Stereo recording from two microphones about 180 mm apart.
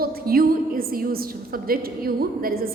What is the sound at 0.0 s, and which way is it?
A woman's voice, 55° right (ahead or behind).